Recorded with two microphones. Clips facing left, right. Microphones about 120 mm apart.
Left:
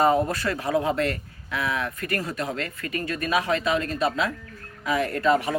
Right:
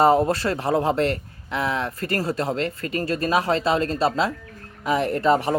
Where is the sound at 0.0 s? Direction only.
30° right (ahead or behind).